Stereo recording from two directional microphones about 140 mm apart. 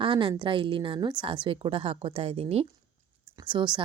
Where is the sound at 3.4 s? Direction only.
35° right (ahead or behind).